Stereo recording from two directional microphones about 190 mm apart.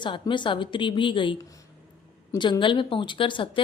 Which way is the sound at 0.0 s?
25° left (ahead or behind).